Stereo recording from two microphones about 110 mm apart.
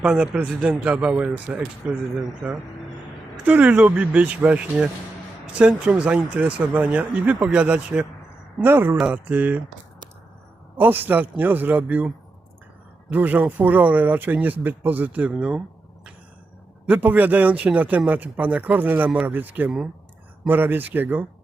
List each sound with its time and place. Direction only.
0.0 s speech: 10° right (ahead or behind)
2.4 s speech: centre (ahead or behind)
3.4 s speech: 15° right (ahead or behind)
10.8 s speech: 20° right (ahead or behind)
13.1 s speech: 15° right (ahead or behind)
16.8 s speech: 15° right (ahead or behind)